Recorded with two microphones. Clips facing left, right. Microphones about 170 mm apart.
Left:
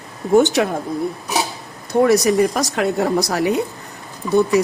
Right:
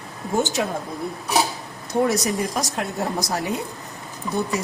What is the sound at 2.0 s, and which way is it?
Speech, 75° left (ahead or behind).